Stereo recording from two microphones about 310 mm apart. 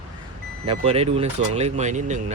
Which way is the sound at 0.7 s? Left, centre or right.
Centre.